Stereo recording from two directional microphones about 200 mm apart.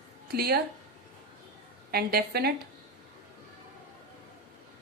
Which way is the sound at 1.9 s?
50° right (ahead or behind).